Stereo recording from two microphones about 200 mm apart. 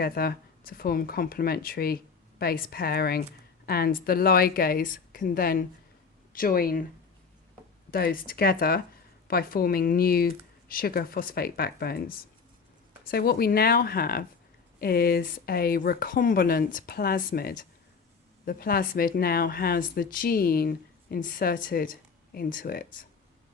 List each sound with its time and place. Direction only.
0.0 s speech: 50° left (ahead or behind)
7.9 s speech: 45° left (ahead or behind)